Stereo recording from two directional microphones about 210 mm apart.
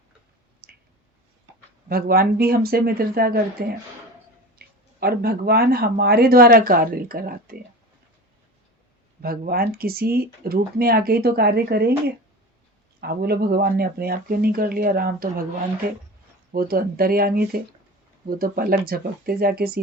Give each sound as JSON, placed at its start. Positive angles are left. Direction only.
{"t": 0.6, "sound": "squish", "side_deg": -45}
{"t": 1.9, "sound": "speech", "side_deg": -45}
{"t": 9.2, "sound": "speech", "side_deg": -45}
{"t": 16.5, "sound": "speech", "side_deg": -45}